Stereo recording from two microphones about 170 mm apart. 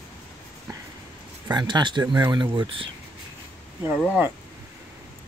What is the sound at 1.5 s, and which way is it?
Speech, 25° right (ahead or behind).